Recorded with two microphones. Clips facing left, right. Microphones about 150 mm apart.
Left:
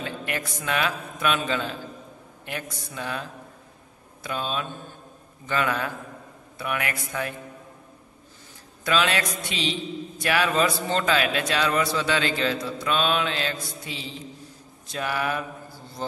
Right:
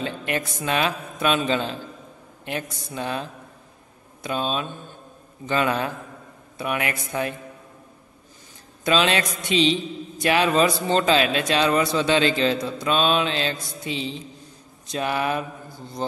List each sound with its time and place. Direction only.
0.0 s a man's voice: 25° right (ahead or behind)
8.8 s a man's voice: 25° right (ahead or behind)